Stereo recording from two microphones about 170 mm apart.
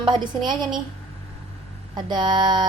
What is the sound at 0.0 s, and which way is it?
Speech, 25° right (ahead or behind).